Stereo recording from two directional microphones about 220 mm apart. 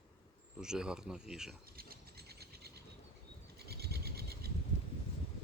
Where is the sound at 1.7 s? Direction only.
45° right (ahead or behind).